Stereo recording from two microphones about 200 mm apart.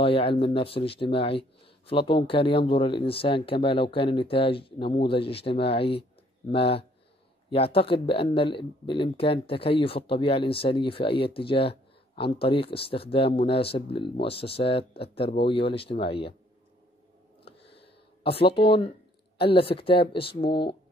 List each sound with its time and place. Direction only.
0.0 s speech: 30° left (ahead or behind)
17.7 s a sound: 25° left (ahead or behind)
19.3 s speech: 25° left (ahead or behind)